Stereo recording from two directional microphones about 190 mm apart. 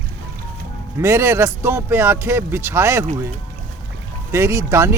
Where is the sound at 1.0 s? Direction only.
15° right (ahead or behind).